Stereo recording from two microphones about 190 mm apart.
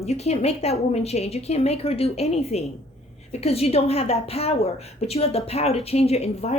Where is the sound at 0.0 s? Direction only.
35° left (ahead or behind).